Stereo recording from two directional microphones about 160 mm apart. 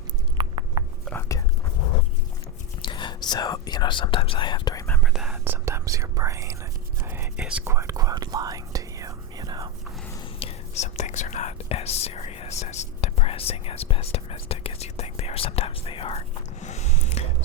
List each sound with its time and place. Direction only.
0.3 s a sound: 30° right (ahead or behind)
2.8 s speech: 30° left (ahead or behind)
5.0 s whispering: 5° right (ahead or behind)
5.6 s speech: 20° right (ahead or behind)
7.0 s whispering: 15° right (ahead or behind)
10.4 s speech: 45° left (ahead or behind)
16.6 s a sound: 45° left (ahead or behind)